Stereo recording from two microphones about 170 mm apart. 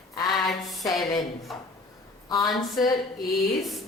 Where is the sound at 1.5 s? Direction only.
Centre (ahead or behind).